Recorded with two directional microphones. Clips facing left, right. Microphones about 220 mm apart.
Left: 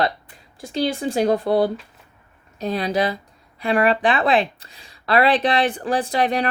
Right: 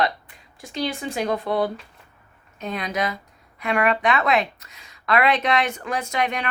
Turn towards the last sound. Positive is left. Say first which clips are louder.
# left 5 dB
turn(degrees=35)  # may be behind; listen again after turning